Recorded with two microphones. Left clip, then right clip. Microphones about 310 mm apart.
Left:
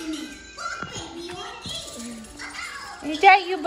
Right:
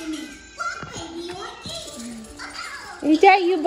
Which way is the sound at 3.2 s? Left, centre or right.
Left.